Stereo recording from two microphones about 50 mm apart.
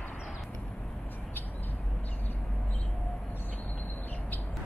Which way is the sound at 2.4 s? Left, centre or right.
Centre.